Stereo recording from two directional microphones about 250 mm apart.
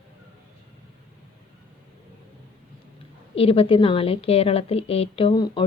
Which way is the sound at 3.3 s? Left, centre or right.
Left.